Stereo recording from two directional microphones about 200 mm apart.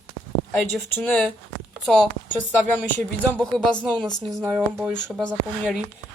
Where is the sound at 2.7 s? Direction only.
5° left (ahead or behind).